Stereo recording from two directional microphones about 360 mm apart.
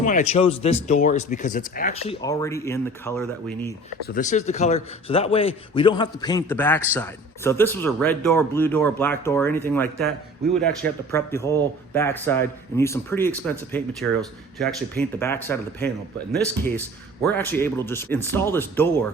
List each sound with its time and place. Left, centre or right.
0.0 s a man's voice: centre
4.0 s a man's voice: left
17.3 s a man's voice: centre